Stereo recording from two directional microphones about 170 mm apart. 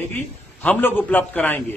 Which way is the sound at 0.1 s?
10° left (ahead or behind).